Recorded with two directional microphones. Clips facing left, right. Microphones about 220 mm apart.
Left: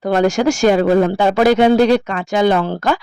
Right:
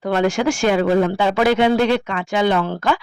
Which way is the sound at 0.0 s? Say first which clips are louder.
Left 4 dB; 40° left (ahead or behind).